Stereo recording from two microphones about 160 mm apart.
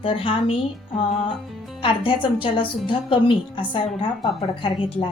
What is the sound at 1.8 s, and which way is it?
A woman's voice, 35° left (ahead or behind).